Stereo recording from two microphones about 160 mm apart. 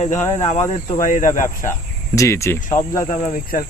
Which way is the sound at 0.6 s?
20° left (ahead or behind).